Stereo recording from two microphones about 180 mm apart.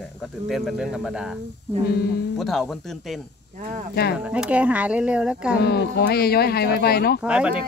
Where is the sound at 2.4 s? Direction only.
Centre (ahead or behind).